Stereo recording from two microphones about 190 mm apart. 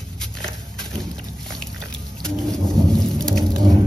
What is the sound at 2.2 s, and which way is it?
Thunder, 5° left (ahead or behind).